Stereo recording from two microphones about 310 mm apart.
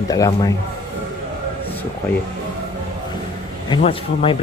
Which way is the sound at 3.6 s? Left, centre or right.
Centre.